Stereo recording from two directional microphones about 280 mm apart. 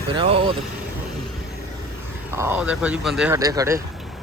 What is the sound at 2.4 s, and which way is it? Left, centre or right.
Speech, centre.